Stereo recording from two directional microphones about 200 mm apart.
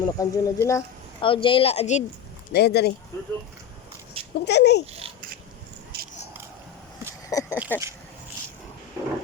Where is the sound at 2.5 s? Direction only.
55° left (ahead or behind).